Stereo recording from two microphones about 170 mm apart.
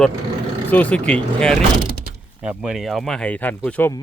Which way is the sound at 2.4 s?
5° right (ahead or behind).